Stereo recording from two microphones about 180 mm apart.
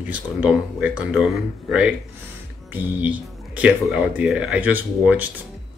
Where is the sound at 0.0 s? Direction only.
10° right (ahead or behind).